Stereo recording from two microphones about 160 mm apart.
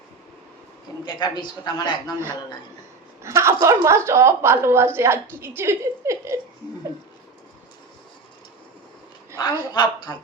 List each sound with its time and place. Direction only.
1.0 s a man's voice: 25° left (ahead or behind)
3.2 s a woman's voice: 20° right (ahead or behind)
9.7 s a man's voice: 30° left (ahead or behind)